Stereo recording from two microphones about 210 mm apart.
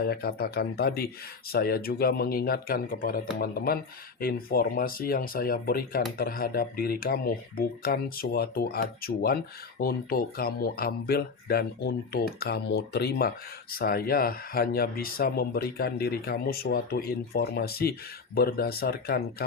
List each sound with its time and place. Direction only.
0.0 s speech: 50° left (ahead or behind)